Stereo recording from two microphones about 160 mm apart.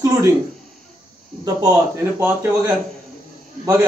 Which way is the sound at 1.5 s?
20° right (ahead or behind).